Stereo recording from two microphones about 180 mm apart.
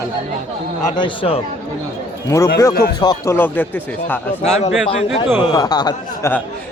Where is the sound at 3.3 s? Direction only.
10° left (ahead or behind).